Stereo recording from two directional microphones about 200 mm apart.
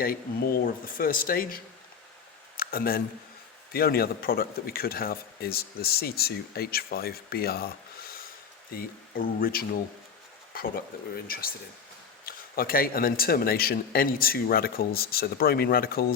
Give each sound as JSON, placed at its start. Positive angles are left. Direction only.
{"t": 0.0, "sound": "a man's voice", "side_deg": 45}
{"t": 2.6, "sound": "a man's voice", "side_deg": 45}
{"t": 8.7, "sound": "a man's voice", "side_deg": 45}